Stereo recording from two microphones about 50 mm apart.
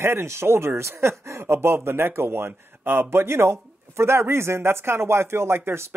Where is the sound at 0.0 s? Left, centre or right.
Right.